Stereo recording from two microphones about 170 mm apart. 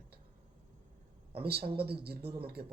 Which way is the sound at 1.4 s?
70° right (ahead or behind).